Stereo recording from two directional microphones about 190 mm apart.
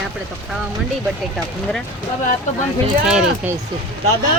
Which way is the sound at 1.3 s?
Centre (ahead or behind).